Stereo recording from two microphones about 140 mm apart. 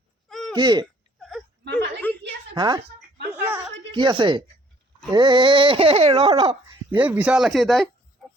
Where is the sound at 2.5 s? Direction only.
30° right (ahead or behind).